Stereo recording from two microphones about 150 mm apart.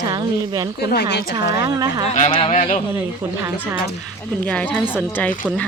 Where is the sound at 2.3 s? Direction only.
40° left (ahead or behind).